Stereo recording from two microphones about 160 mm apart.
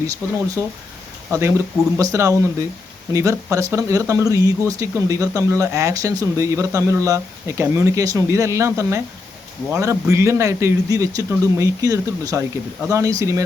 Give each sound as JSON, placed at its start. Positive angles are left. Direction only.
{"t": 0.2, "sound": "speech", "side_deg": -15}